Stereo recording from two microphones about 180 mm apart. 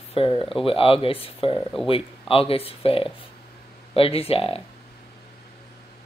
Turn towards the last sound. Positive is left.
turn(degrees=30)  # may be behind; listen again after turning